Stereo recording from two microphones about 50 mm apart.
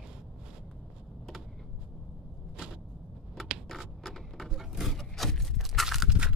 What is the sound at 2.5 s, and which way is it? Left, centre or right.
Vehicle, centre.